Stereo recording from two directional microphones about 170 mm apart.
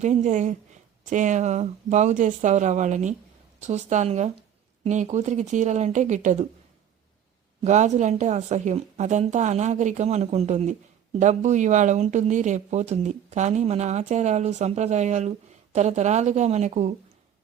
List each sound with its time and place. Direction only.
0.0 s a woman's voice: 45° right (ahead or behind)
7.6 s a woman's voice: 45° right (ahead or behind)